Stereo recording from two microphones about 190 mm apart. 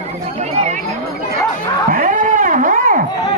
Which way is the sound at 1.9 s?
45° right (ahead or behind).